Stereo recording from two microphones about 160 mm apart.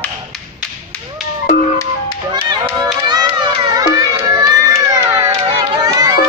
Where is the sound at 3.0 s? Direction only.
25° right (ahead or behind).